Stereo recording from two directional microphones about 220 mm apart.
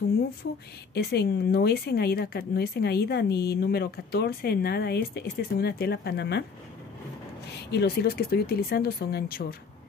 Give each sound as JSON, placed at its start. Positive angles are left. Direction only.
{"t": 0.9, "sound": "speech", "side_deg": 50}
{"t": 7.7, "sound": "speech", "side_deg": 45}